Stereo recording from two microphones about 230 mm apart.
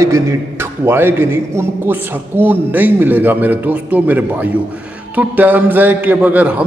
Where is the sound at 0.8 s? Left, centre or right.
Centre.